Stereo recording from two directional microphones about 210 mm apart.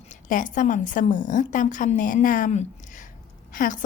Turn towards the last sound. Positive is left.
turn(degrees=40)  # may be behind; listen again after turning